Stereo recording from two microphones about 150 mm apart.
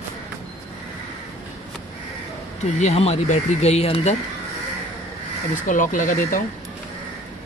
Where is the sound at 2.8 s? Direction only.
45° left (ahead or behind).